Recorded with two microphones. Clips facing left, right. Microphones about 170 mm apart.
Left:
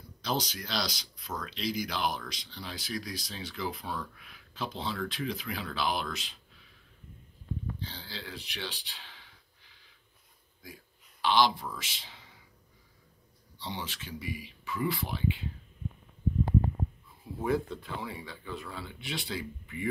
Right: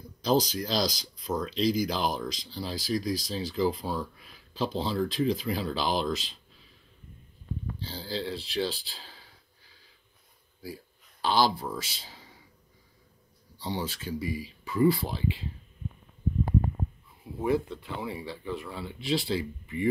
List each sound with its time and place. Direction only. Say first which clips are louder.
0.2 s speech: right 8 dB; 35° right (ahead or behind)
7.8 s speech: right 9 dB; 35° right (ahead or behind)
13.6 s speech: right 6 dB; 40° right (ahead or behind)
17.4 s speech: right 3 dB; 25° right (ahead or behind)